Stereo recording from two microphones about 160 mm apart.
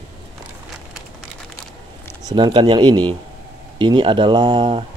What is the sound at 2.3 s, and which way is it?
Speech, 25° right (ahead or behind).